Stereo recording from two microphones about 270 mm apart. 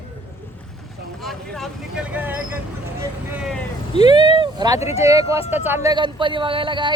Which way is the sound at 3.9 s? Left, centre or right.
Left.